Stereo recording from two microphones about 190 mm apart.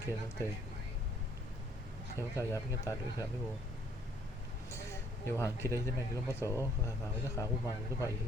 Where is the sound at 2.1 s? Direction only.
15° left (ahead or behind).